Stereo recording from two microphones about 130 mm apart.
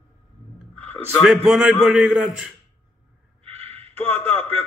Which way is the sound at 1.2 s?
10° right (ahead or behind).